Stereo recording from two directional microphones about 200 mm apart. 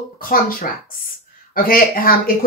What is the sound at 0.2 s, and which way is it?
Speech, 45° left (ahead or behind).